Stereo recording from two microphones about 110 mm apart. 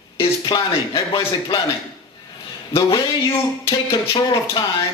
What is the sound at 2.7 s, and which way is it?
Speech, 55° left (ahead or behind).